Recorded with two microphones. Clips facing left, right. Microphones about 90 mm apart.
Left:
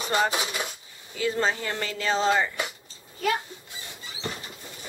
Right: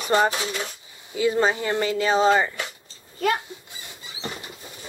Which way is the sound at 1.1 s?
15° right (ahead or behind).